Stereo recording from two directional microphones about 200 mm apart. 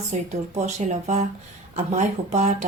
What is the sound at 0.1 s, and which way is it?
Speech, 35° right (ahead or behind).